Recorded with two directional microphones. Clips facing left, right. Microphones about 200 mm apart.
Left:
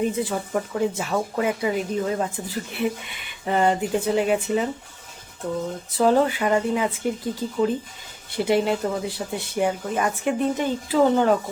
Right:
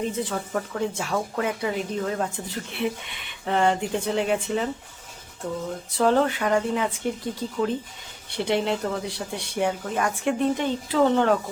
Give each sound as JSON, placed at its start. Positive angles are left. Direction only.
{"t": 0.0, "sound": "speech", "side_deg": 10}
{"t": 6.0, "sound": "speech", "side_deg": 5}